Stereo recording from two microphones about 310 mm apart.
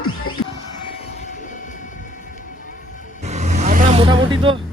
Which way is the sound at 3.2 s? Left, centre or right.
Right.